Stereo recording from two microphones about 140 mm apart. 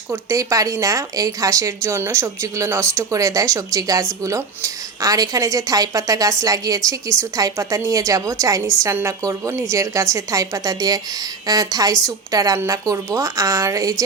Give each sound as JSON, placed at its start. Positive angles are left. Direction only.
{"t": 0.1, "sound": "a woman's voice", "side_deg": -20}